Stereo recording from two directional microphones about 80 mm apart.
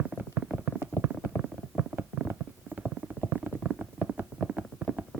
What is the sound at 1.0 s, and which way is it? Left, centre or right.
Stomach rumble, centre.